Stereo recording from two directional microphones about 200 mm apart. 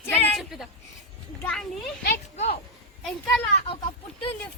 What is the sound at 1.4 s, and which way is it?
Speech, 5° left (ahead or behind).